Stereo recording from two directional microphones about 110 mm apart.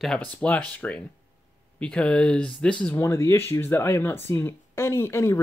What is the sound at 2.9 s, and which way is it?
Speech, 25° left (ahead or behind).